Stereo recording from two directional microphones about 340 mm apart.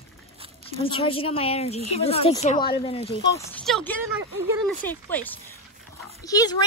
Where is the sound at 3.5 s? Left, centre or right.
Centre.